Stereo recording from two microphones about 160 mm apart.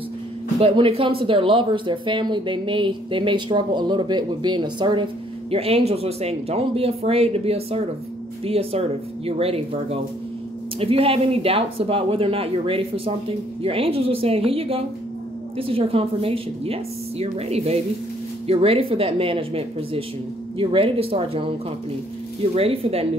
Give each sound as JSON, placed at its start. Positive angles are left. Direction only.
{"t": 0.6, "sound": "speech", "side_deg": -35}
{"t": 22.6, "sound": "speech", "side_deg": -40}